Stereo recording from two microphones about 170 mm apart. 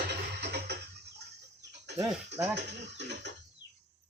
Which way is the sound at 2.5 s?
85° right.